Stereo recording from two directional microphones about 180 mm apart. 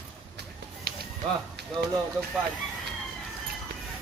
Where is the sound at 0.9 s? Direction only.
55° right (ahead or behind).